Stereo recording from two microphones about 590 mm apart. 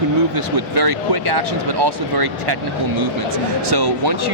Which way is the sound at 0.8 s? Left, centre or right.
Right.